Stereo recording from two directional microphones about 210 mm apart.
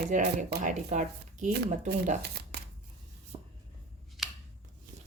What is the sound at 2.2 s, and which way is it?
Shuffling cards, 50° right (ahead or behind).